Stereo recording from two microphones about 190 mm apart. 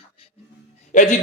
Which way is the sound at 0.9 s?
40° left (ahead or behind).